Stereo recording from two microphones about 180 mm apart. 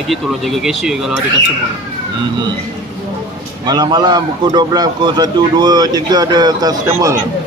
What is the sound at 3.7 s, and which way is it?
A man's voice, 25° right (ahead or behind).